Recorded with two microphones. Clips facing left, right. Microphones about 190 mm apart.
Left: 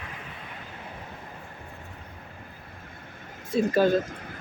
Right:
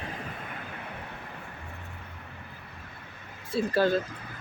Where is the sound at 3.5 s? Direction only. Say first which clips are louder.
Left 3 dB; 15° left (ahead or behind).